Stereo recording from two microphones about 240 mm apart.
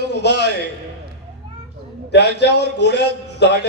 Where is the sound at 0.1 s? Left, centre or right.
Left.